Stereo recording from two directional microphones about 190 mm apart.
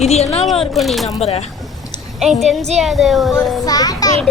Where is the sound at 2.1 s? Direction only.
Centre (ahead or behind).